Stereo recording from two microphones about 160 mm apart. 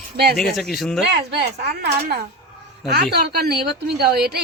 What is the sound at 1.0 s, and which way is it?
A woman's voice, 90° right.